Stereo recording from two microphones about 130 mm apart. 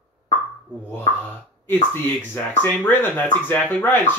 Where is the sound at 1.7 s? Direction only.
15° left (ahead or behind).